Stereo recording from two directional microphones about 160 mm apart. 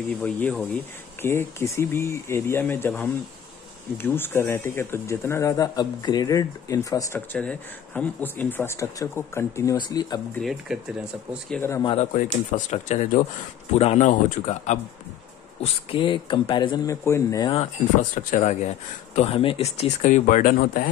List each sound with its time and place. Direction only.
0.2 s speech: 10° left (ahead or behind)
4.0 s speech: 15° left (ahead or behind)
7.2 s speech: 5° left (ahead or behind); by 10.2 s 25° left (ahead or behind)
10.4 s speech: 5° right (ahead or behind)
11.5 s speech: 15° left (ahead or behind)
12.0 s speech: 55° left (ahead or behind)
15.6 s speech: 35° left (ahead or behind)
18.1 s speech: 50° left (ahead or behind)